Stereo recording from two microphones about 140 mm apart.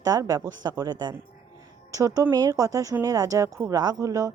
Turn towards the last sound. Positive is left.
turn(degrees=-25)  # may be behind; listen again after turning